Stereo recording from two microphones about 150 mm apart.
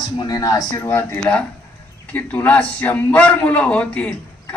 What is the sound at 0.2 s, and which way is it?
Speech, 25° left (ahead or behind).